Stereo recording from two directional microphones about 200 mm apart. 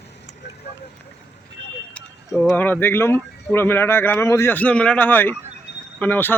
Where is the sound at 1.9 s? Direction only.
5° left (ahead or behind).